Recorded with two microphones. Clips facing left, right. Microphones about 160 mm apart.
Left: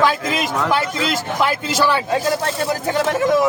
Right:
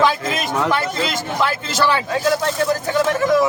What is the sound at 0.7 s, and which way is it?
A man's voice, 10° left (ahead or behind).